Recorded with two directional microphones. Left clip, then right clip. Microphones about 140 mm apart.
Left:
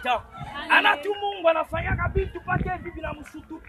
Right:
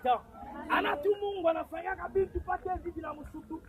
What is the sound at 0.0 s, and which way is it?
Speech, 15° left (ahead or behind).